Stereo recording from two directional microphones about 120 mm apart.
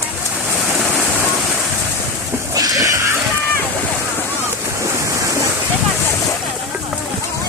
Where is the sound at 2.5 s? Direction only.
30° right (ahead or behind).